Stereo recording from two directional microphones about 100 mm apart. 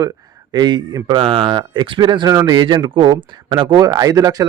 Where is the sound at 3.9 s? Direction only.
35° right (ahead or behind).